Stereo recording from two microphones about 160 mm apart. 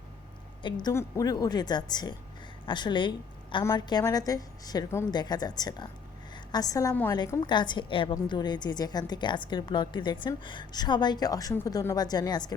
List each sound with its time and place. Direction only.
0.6 s a woman's voice: 25° left (ahead or behind)
7.1 s a woman's voice: 25° left (ahead or behind)